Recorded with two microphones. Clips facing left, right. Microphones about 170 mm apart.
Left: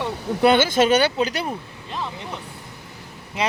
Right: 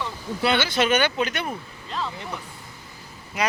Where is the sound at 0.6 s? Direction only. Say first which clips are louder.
Left 4 dB; 45° left (ahead or behind).